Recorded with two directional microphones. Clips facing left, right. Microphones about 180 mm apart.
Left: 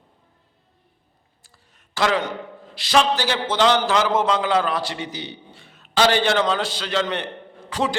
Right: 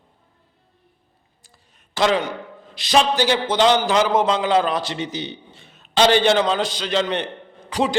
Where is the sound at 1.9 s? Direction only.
20° right (ahead or behind).